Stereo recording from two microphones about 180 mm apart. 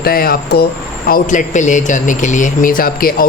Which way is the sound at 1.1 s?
45° left (ahead or behind).